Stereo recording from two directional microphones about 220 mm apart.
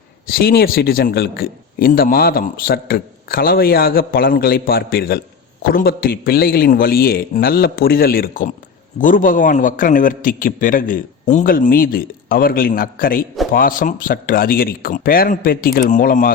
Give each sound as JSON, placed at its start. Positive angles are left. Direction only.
{"t": 0.3, "sound": "a man's voice", "side_deg": 45}